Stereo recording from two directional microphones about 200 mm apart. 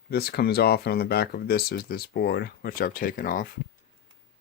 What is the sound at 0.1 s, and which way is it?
Speech, 50° left (ahead or behind).